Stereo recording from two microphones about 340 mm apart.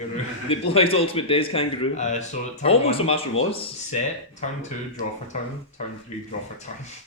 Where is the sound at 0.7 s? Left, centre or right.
Centre.